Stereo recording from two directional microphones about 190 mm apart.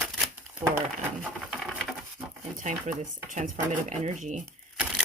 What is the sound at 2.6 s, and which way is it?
Speech, 40° right (ahead or behind).